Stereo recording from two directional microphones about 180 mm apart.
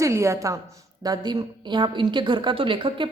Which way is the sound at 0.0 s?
15° right (ahead or behind).